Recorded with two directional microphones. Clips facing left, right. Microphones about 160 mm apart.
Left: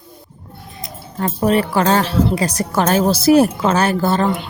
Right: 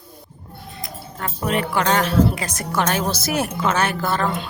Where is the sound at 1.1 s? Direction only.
35° left (ahead or behind).